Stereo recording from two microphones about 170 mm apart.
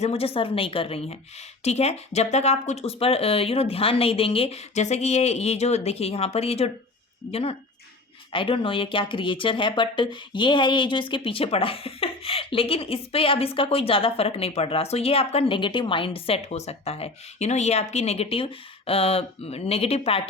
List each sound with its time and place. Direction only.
0.0 s speech: 35° left (ahead or behind)